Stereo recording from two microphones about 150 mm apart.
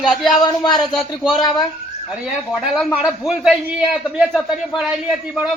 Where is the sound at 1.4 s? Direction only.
30° left (ahead or behind).